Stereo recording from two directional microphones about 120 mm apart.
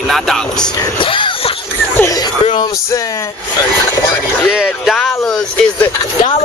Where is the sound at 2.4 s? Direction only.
40° left (ahead or behind).